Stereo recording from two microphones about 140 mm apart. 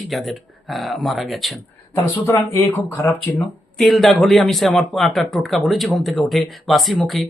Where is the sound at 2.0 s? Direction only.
20° left (ahead or behind).